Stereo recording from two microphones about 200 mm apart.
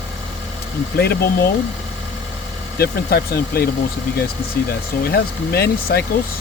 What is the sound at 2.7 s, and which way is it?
Speech, 50° left (ahead or behind).